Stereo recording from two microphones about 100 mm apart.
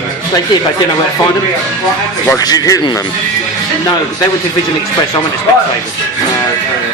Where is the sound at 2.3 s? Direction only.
40° left (ahead or behind).